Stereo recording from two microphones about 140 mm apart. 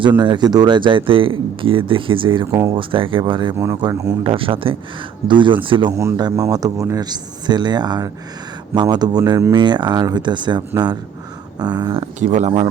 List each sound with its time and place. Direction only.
0.2 s speech: 30° right (ahead or behind)
2.5 s speech: 20° right (ahead or behind)
2.7 s speech: 40° right (ahead or behind)
3.6 s speech: 25° right (ahead or behind)
4.2 s speech: 40° right (ahead or behind)
5.9 s speech: 20° right (ahead or behind)
11.6 s speech: 30° right (ahead or behind)
12.2 s speech: 60° right (ahead or behind)